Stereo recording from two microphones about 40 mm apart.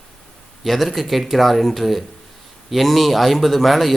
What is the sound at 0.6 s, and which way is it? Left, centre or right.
A man's voice, centre.